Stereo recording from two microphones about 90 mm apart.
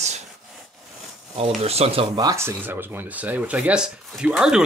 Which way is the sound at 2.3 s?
30° right (ahead or behind).